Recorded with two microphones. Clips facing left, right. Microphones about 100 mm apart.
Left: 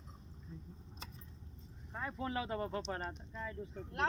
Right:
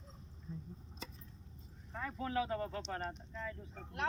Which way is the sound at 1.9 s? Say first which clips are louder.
Even; 20° left (ahead or behind).